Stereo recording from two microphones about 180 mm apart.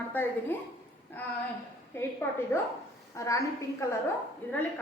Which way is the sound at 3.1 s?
15° left (ahead or behind).